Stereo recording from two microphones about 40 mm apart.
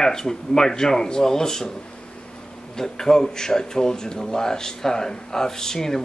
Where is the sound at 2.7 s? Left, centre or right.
Centre.